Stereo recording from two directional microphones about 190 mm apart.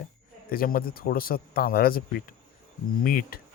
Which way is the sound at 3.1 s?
50° left (ahead or behind).